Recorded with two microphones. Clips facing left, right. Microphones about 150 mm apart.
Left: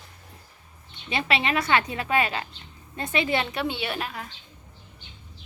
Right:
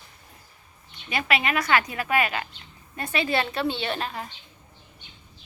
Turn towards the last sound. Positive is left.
turn(degrees=5)  # may be behind; listen again after turning